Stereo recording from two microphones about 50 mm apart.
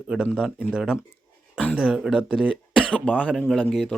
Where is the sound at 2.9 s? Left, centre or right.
Left.